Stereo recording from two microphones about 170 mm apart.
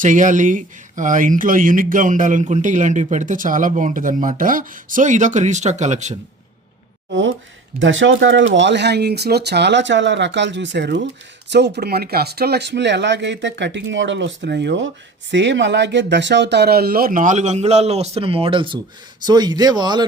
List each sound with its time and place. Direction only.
0.0 s speech: 50° right (ahead or behind)
7.1 s speech: 90° right; by 20.1 s 25° right (ahead or behind)